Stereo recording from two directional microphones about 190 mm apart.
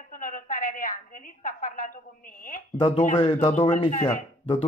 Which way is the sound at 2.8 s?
35° left (ahead or behind).